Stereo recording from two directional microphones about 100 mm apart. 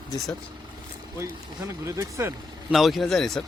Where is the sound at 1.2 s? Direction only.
30° right (ahead or behind).